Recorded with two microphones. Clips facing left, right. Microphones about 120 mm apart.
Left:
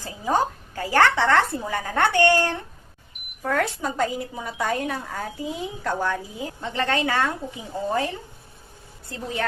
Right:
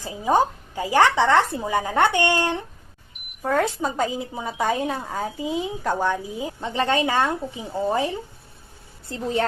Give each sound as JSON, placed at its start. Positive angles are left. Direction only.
{"t": 0.0, "sound": "a woman's voice", "side_deg": -15}
{"t": 9.0, "sound": "a woman's voice", "side_deg": -30}